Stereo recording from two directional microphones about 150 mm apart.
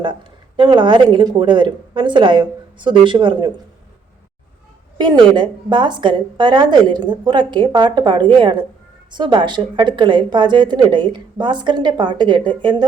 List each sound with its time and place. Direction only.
0.0 s a woman's voice: 30° right (ahead or behind)
4.9 s a woman's voice: 30° right (ahead or behind)